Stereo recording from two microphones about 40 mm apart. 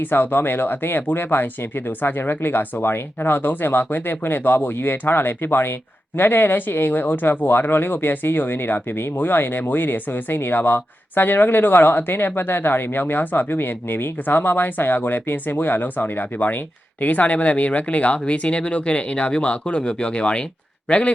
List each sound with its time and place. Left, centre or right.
0.0 s speech: left
17.0 s speech: left